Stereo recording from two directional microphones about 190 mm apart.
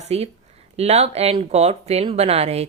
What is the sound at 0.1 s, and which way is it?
Speech, 35° right (ahead or behind).